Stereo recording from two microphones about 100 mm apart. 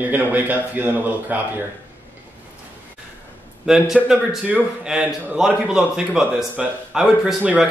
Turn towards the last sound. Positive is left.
turn(degrees=-10)  # may be behind; listen again after turning